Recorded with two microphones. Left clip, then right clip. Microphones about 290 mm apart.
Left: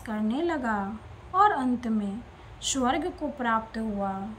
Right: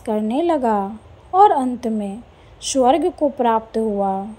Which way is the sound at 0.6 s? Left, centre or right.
Right.